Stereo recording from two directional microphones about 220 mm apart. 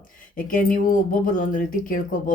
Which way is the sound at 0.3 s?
40° left (ahead or behind).